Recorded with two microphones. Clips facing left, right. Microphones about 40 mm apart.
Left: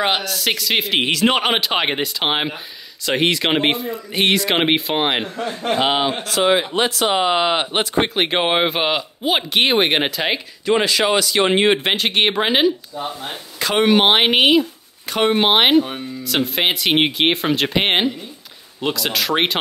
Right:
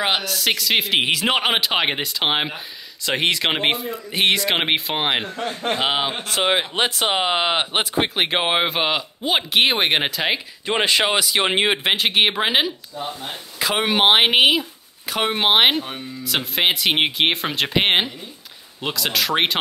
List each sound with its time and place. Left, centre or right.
0.0 s speech: centre
5.5 s speech: centre
5.8 s speech: centre
6.2 s speech: right; by 10.4 s centre
10.6 s speech: right
11.1 s speech: centre
11.7 s speech: centre
12.9 s speech: centre
13.6 s speech: centre